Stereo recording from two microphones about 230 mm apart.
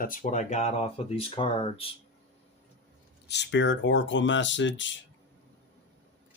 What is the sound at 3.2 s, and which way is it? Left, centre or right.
Speech, left.